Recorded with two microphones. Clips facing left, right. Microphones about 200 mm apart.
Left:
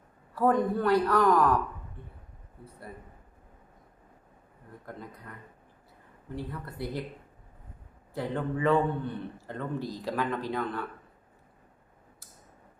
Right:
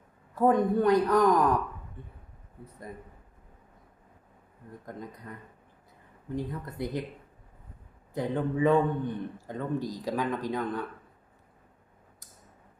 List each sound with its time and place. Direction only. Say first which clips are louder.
0.3 s speech: right 2 dB; 20° right (ahead or behind)
6.3 s a man's voice: right 4 dB; 15° right (ahead or behind)
8.1 s a man's voice: right 2 dB; 15° right (ahead or behind)